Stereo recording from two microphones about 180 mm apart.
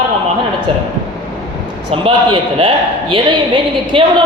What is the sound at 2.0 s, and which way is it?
A woman's voice, 30° right (ahead or behind).